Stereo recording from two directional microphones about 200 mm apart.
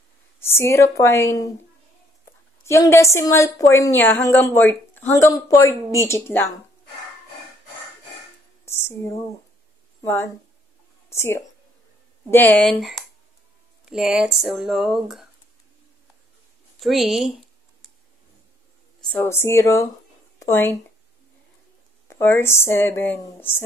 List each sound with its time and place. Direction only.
0.4 s a woman's voice: 10° left (ahead or behind)
2.6 s a woman's voice: 15° left (ahead or behind)
8.6 s a sound: 15° left (ahead or behind)
10.0 s a woman's voice: 10° left (ahead or behind)
16.8 s speech: centre (ahead or behind)
19.0 s a woman's voice: 10° left (ahead or behind)
22.0 s a woman's voice: 10° left (ahead or behind)